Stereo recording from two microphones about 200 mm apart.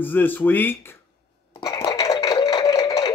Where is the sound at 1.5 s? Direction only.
20° left (ahead or behind).